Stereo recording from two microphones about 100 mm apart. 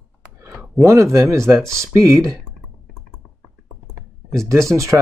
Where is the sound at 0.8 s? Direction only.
30° right (ahead or behind).